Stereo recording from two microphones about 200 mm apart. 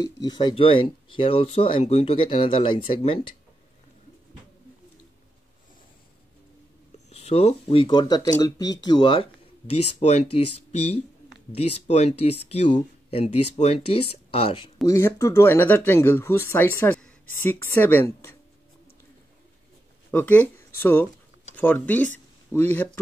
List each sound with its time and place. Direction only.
0.0 s speech: 20° left (ahead or behind)
7.1 s speech: 30° left (ahead or behind)
14.9 s speech: 15° left (ahead or behind)
20.1 s speech: 10° left (ahead or behind)